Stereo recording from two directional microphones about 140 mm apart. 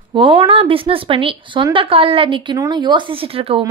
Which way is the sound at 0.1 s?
40° right (ahead or behind).